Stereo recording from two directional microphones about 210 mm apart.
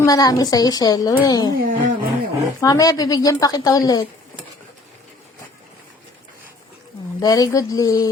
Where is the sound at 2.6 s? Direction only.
15° left (ahead or behind).